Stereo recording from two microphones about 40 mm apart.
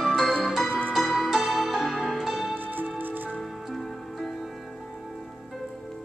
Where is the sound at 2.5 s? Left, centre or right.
Right.